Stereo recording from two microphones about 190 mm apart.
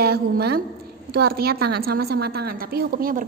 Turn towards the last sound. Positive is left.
turn(degrees=-50)  # may be behind; listen again after turning